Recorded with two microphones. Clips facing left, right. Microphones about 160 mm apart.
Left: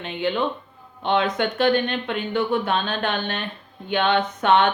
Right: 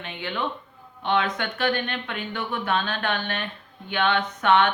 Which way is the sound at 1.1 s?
25° left (ahead or behind).